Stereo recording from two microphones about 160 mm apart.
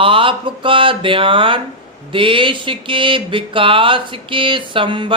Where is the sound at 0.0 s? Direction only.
35° right (ahead or behind).